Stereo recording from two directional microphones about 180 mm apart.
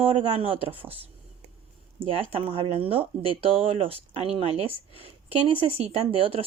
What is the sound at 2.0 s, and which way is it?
Speech, 35° right (ahead or behind).